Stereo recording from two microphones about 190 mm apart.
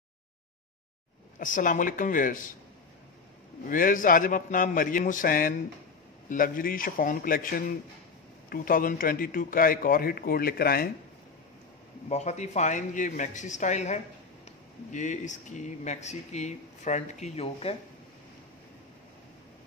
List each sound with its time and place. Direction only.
1.4 s a man's voice: 45° left (ahead or behind)
3.6 s a man's voice: 45° left (ahead or behind)
12.1 s speech: 35° left (ahead or behind)